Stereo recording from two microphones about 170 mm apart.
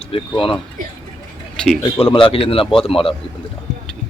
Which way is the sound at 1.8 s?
30° left (ahead or behind).